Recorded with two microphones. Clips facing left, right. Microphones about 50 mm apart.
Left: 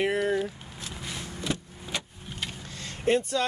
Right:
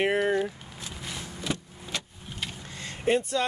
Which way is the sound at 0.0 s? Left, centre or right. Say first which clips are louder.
Right 1 dB; right.